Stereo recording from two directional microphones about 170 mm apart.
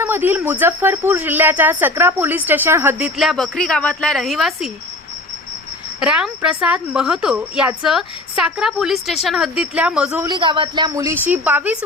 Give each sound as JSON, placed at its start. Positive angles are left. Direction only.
{"t": 0.0, "sound": "speech", "side_deg": -10}
{"t": 3.2, "sound": "a woman's voice", "side_deg": 0}
{"t": 6.0, "sound": "a woman's voice", "side_deg": -5}
{"t": 10.2, "sound": "a woman's voice", "side_deg": -25}